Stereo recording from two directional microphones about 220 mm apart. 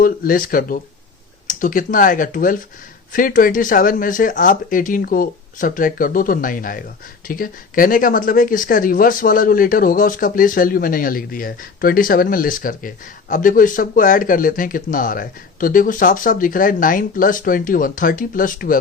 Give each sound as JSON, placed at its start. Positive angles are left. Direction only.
{"t": 0.0, "sound": "speech", "side_deg": 40}